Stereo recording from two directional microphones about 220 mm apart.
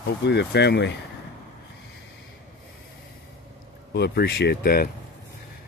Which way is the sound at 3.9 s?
45° left (ahead or behind).